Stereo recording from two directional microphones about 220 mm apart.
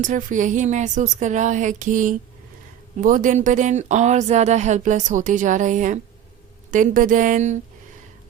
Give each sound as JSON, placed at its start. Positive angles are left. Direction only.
{"t": 0.0, "sound": "speech", "side_deg": -35}